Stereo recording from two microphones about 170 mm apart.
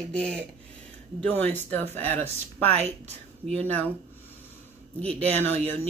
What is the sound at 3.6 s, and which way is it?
Speech, 10° left (ahead or behind).